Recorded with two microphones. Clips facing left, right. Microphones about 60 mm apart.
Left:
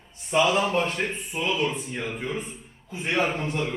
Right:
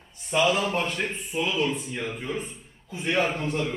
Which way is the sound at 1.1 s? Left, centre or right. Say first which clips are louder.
Right 2 dB; left.